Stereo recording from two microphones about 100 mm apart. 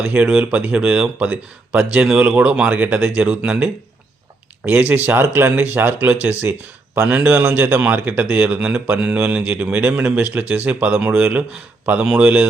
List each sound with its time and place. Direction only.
0.0 s speech: 15° right (ahead or behind)